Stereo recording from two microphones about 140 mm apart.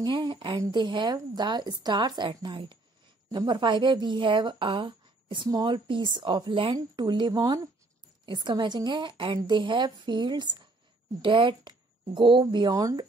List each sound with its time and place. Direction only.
0.0 s a woman's voice: 35° right (ahead or behind)